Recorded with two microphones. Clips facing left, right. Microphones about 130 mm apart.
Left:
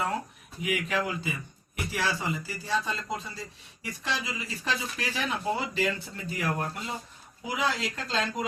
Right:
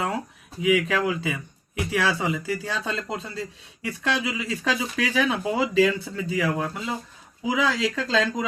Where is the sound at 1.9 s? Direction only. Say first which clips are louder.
Right 6 dB; 90° right.